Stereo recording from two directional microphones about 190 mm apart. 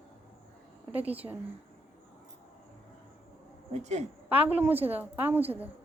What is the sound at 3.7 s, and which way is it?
Speech, 35° right (ahead or behind).